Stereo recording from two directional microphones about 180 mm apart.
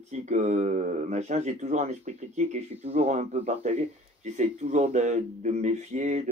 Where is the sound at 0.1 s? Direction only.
40° right (ahead or behind).